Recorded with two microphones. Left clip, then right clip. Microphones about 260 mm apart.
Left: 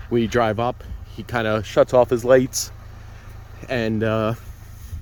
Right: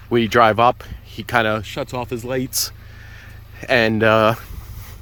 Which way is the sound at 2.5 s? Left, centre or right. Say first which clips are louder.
Right 4 dB; centre.